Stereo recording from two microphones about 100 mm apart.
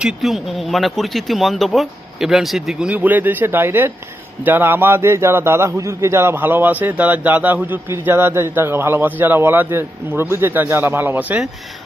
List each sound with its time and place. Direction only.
0.0 s a man's voice: 5° right (ahead or behind)